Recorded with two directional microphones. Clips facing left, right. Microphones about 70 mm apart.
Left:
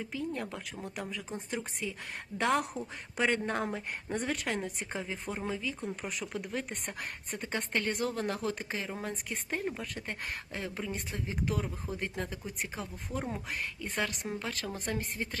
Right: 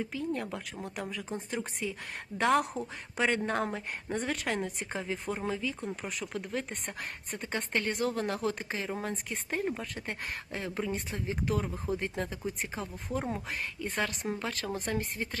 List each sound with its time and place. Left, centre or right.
0.0 s speech: centre